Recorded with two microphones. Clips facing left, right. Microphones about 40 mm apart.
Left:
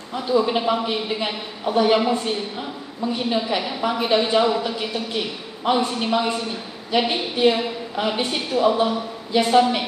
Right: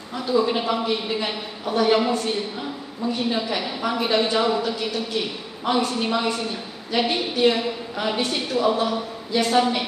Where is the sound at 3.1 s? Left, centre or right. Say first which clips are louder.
Left 3 dB; left.